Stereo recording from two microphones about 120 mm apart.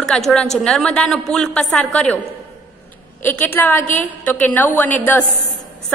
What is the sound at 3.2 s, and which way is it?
A woman's voice, 20° left (ahead or behind).